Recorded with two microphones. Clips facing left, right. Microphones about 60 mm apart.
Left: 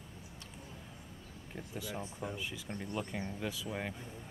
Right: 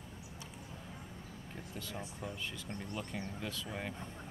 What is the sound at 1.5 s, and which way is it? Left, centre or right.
Speech, centre.